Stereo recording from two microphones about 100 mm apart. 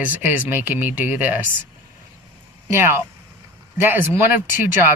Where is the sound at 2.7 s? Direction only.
25° right (ahead or behind).